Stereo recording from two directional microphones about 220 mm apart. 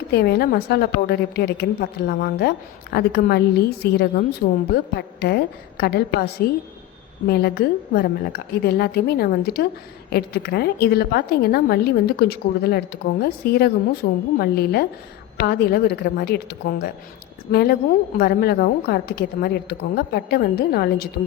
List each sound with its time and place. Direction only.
0.1 s a woman's voice: 45° left (ahead or behind)